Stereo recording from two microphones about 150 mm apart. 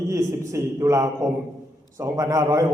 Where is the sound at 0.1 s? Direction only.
20° right (ahead or behind).